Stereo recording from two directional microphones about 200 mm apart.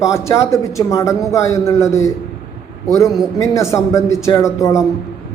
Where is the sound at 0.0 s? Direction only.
15° left (ahead or behind).